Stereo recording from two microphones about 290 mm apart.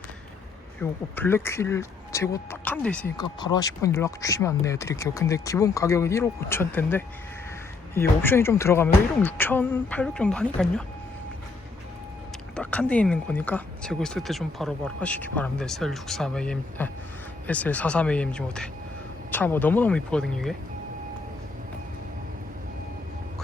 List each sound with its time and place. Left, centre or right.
0.8 s speech: centre
12.5 s speech: centre